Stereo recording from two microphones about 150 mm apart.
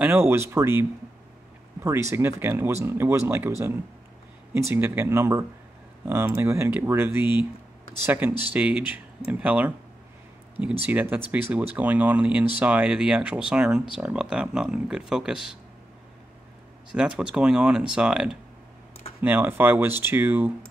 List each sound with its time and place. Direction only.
0.0 s speech: 15° right (ahead or behind)
10.9 s speech: 10° right (ahead or behind)
16.9 s speech: 5° right (ahead or behind)